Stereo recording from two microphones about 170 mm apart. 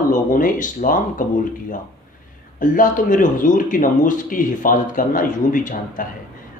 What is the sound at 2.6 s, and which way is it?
Speech, 50° left (ahead or behind).